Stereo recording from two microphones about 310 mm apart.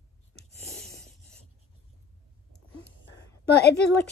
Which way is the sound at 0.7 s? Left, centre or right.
Centre.